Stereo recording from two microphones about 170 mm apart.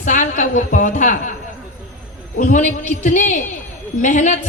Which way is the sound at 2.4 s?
50° left (ahead or behind).